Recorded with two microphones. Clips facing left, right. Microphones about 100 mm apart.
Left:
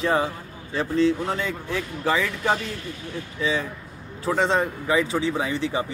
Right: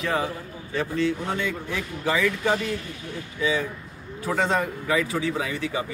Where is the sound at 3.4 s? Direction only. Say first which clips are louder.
Right 1 dB; 30° left (ahead or behind).